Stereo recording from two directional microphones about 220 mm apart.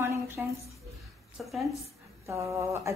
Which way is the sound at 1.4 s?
Centre (ahead or behind).